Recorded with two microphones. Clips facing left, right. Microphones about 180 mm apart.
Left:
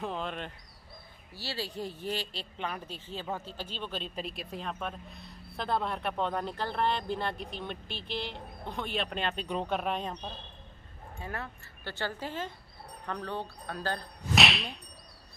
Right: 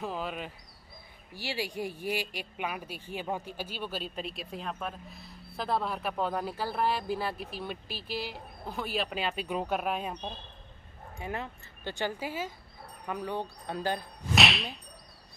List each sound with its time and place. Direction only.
0.0 s speech: 5° right (ahead or behind)
11.1 s speech: 15° right (ahead or behind)
14.3 s speech: centre (ahead or behind)